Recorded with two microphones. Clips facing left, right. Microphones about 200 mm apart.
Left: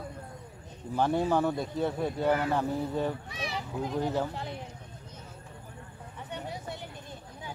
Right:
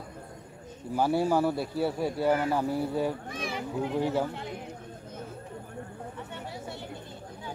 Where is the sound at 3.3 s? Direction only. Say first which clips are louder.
Right 3 dB; 50° right (ahead or behind).